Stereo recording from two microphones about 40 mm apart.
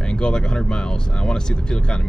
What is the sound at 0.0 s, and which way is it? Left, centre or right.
Speech, left.